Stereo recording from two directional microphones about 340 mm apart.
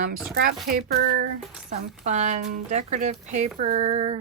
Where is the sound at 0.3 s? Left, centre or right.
Right.